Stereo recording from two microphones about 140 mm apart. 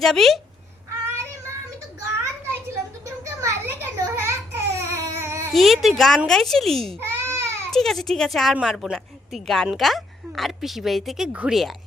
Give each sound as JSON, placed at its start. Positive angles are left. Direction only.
{"t": 0.0, "sound": "a woman's voice", "side_deg": 0}
{"t": 2.0, "sound": "a sound", "side_deg": -20}
{"t": 5.5, "sound": "a woman's voice", "side_deg": 0}
{"t": 7.0, "sound": "baby cry", "side_deg": -20}
{"t": 7.7, "sound": "a woman's voice", "side_deg": 0}